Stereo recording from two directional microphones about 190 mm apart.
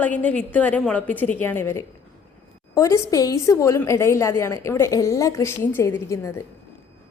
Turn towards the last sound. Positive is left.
turn(degrees=15)  # may be behind; listen again after turning